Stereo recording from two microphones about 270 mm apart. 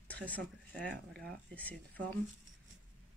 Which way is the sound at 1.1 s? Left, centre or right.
Centre.